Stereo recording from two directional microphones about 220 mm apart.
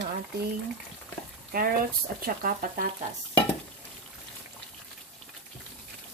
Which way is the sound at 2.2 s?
40° right (ahead or behind).